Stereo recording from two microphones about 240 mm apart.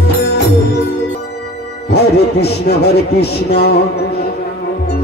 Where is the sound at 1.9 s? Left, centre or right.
Left.